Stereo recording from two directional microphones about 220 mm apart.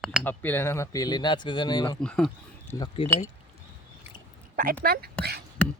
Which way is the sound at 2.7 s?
15° left (ahead or behind).